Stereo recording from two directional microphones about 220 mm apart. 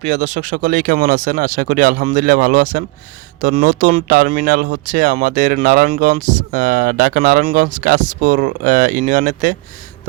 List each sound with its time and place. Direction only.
0.0 s speech: 35° right (ahead or behind)